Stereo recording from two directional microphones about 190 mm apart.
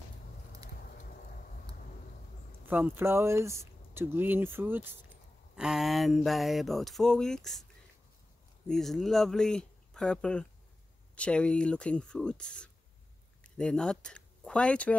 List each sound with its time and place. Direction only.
0.8 s vehicle: 50° left (ahead or behind)
2.6 s speech: 10° right (ahead or behind)
8.6 s speech: centre (ahead or behind)